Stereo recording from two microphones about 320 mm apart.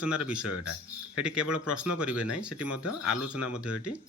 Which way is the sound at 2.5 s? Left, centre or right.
Left.